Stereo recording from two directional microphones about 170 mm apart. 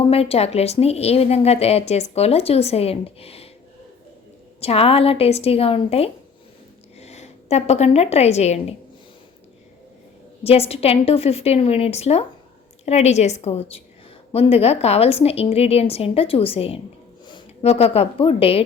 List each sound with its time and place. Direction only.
0.0 s a woman's voice: 35° left (ahead or behind)
4.6 s a woman's voice: 35° left (ahead or behind)
10.4 s a woman's voice: 35° left (ahead or behind)